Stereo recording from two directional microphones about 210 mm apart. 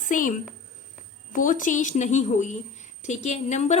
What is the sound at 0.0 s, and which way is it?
A woman's voice, 40° left (ahead or behind).